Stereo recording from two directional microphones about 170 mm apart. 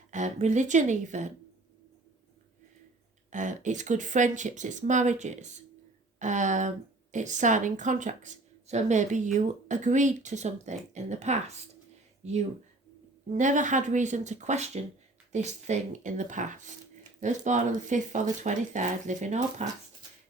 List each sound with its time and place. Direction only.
0.1 s a woman's voice: 45° right (ahead or behind)
3.2 s a woman's voice: 45° right (ahead or behind)